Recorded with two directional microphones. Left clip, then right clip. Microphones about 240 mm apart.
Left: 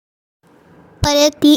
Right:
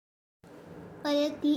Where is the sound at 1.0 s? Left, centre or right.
Left.